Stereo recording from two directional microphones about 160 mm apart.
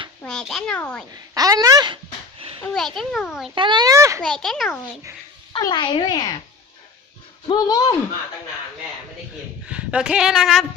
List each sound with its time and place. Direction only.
0.3 s a child's voice: centre (ahead or behind)
1.1 s speech: 25° right (ahead or behind)
2.6 s a woman's voice: centre (ahead or behind)
3.5 s speech: 30° right (ahead or behind)
4.2 s a woman's voice: 5° left (ahead or behind)
5.5 s speech: 25° left (ahead or behind)
7.4 s speech: 25° left (ahead or behind)
9.6 s a woman's voice: 5° right (ahead or behind)